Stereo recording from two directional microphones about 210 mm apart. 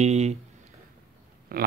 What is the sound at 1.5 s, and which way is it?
Speech, 45° right (ahead or behind).